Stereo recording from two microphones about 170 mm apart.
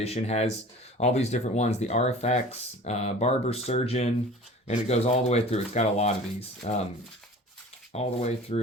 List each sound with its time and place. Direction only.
0.0 s speech: 40° left (ahead or behind)
7.9 s speech: 40° left (ahead or behind)